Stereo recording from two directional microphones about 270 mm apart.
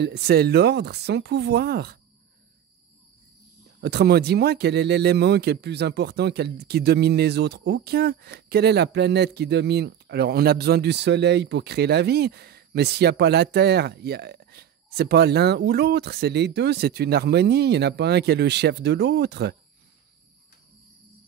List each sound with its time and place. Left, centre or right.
0.0 s speech: right
3.8 s speech: right